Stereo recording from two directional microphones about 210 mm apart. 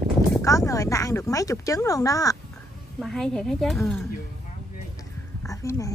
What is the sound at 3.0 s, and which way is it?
A woman's voice, centre (ahead or behind).